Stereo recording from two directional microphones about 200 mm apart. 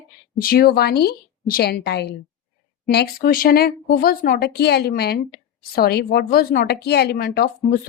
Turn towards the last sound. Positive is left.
turn(degrees=50)  # may be behind; listen again after turning